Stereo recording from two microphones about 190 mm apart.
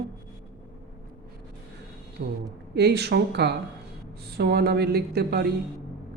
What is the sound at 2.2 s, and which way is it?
Speech, 65° right (ahead or behind).